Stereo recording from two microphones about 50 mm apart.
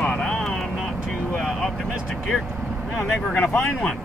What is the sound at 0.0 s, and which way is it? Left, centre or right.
Vehicle, centre.